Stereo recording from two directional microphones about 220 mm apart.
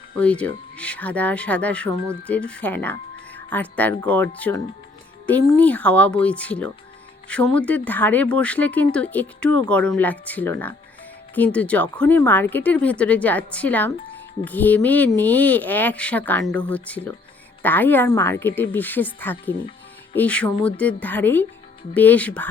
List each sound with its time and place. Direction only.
0.2 s speech: 5° left (ahead or behind)